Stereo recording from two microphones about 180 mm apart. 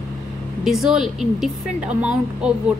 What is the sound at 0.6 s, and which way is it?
Speech, centre (ahead or behind).